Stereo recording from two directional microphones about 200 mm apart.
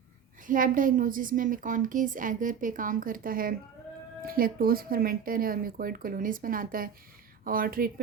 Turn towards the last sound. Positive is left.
turn(degrees=-45)  # may be behind; listen again after turning